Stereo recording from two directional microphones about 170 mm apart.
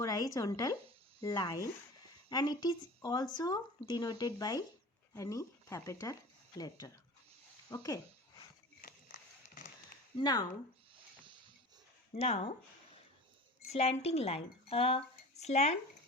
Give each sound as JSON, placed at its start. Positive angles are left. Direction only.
{"t": 0.0, "sound": "speech", "side_deg": 20}
{"t": 10.2, "sound": "speech", "side_deg": 25}
{"t": 12.1, "sound": "speech", "side_deg": 35}
{"t": 13.7, "sound": "speech", "side_deg": 35}